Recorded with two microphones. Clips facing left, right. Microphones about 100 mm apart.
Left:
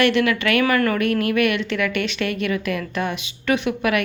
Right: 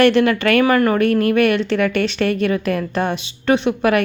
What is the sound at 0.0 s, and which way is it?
A woman's voice, 35° right (ahead or behind).